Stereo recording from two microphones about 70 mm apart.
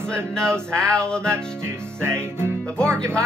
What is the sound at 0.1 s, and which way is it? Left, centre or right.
Male singing, centre.